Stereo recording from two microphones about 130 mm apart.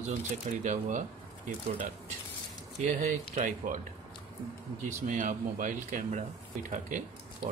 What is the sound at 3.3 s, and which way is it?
Speech, 90° right.